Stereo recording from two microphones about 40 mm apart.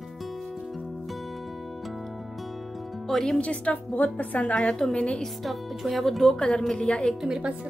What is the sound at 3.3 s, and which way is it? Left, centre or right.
A woman's voice, left.